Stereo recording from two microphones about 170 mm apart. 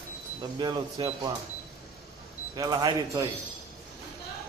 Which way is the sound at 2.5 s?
25° right (ahead or behind).